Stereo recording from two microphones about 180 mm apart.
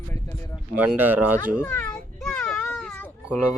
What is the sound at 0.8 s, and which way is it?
Speech, 10° right (ahead or behind).